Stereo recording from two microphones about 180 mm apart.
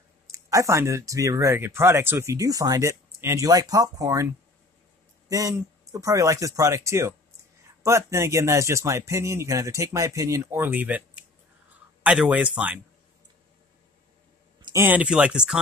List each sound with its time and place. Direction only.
0.3 s speech: 15° right (ahead or behind)
5.3 s speech: 20° right (ahead or behind)
14.6 s speech: 15° right (ahead or behind)